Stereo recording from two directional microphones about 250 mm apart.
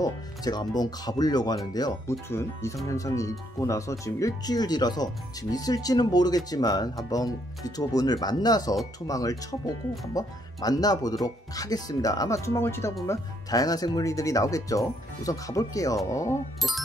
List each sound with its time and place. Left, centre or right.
0.0 s speech: centre